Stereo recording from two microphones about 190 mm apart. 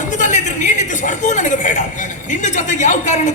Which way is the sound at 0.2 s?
40° left (ahead or behind).